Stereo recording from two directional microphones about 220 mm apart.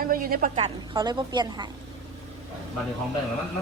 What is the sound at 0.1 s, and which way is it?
Speech, 40° right (ahead or behind).